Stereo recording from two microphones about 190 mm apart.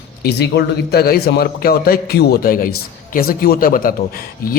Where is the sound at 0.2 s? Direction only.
60° left (ahead or behind).